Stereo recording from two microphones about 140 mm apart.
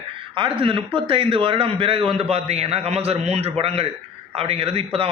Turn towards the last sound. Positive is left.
turn(degrees=-45)  # may be behind; listen again after turning